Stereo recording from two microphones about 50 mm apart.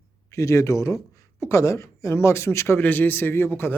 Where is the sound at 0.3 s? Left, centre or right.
Left.